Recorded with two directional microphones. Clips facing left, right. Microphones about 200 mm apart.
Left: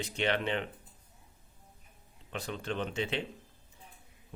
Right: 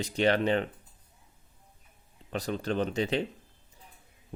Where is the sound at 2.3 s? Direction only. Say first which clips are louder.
Right 6 dB; 40° right (ahead or behind).